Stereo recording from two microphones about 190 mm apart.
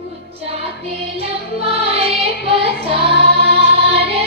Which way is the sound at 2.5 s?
30° right (ahead or behind).